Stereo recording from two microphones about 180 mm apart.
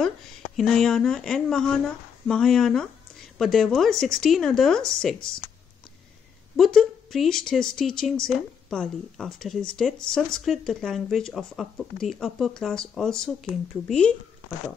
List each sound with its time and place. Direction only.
0.6 s speech: centre (ahead or behind)
6.5 s speech: centre (ahead or behind)